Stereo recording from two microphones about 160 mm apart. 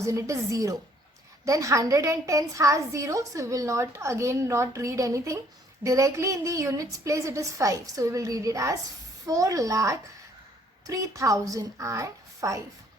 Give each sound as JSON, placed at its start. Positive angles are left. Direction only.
{"t": 0.0, "sound": "a woman's voice", "side_deg": -20}